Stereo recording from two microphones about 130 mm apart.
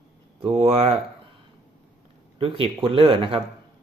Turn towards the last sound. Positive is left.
turn(degrees=-45)  # may be behind; listen again after turning